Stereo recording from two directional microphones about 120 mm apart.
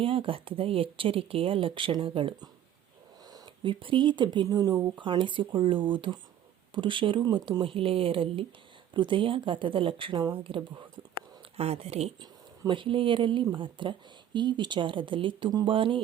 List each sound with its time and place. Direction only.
0.0 s speech: 50° right (ahead or behind)
7.6 s speech: 50° right (ahead or behind)
11.5 s speech: 55° right (ahead or behind)
12.2 s speech: 40° right (ahead or behind)